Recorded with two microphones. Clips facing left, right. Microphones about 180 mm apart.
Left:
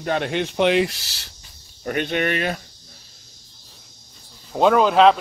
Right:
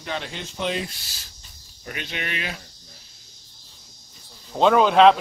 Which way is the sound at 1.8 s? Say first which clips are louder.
Left 11 dB; 50° left (ahead or behind).